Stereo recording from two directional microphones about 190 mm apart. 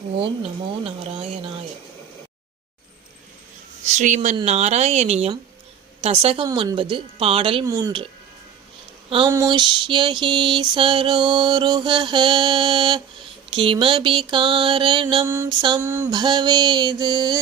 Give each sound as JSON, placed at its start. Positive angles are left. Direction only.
{"t": 0.9, "sound": "mantra", "side_deg": -30}
{"t": 3.8, "sound": "speech", "side_deg": -40}
{"t": 6.0, "sound": "mantra", "side_deg": -30}
{"t": 7.6, "sound": "mantra", "side_deg": -20}
{"t": 9.0, "sound": "speech", "side_deg": -25}
{"t": 9.3, "sound": "mantra", "side_deg": -20}
{"t": 15.3, "sound": "a sound", "side_deg": -15}
{"t": 16.1, "sound": "mantra", "side_deg": -20}